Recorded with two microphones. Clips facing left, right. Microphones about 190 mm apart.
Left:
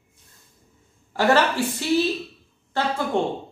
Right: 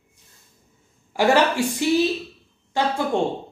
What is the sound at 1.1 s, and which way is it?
Speech, 15° right (ahead or behind).